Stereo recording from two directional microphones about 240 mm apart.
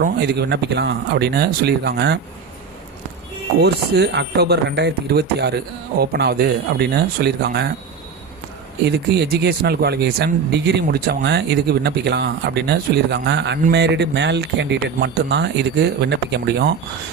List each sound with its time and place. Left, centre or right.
0.0 s speech: right
3.6 s speech: right
8.8 s speech: right